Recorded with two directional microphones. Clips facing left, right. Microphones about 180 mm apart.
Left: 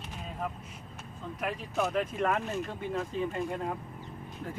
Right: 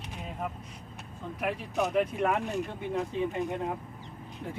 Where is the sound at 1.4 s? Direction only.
15° right (ahead or behind).